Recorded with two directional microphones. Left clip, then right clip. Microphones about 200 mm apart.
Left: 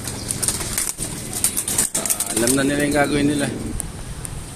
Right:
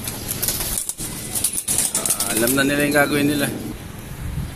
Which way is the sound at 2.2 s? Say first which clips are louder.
Right 1 dB; 5° left (ahead or behind).